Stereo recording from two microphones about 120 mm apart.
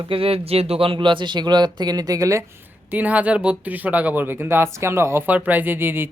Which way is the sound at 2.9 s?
15° right (ahead or behind).